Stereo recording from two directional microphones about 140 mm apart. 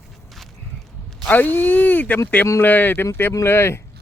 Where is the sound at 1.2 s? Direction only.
10° left (ahead or behind).